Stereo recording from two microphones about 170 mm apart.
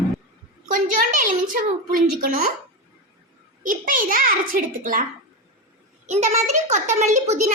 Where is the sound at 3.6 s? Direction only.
50° right (ahead or behind).